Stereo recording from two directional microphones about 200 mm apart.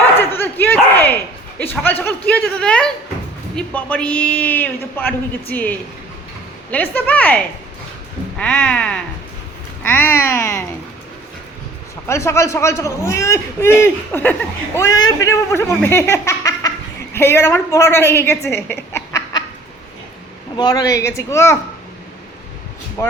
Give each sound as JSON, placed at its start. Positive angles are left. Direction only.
{"t": 0.2, "sound": "dog", "side_deg": 10}
{"t": 1.5, "sound": "a man's voice", "side_deg": 10}
{"t": 12.0, "sound": "a man's voice", "side_deg": 15}
{"t": 20.6, "sound": "a man's voice", "side_deg": 20}
{"t": 23.0, "sound": "speech", "side_deg": 15}